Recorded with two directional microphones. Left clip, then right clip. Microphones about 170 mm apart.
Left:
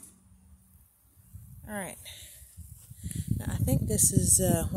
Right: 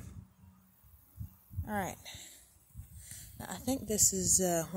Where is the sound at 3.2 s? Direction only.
30° left (ahead or behind).